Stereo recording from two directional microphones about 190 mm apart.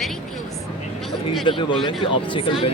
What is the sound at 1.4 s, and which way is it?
Speech, 25° left (ahead or behind).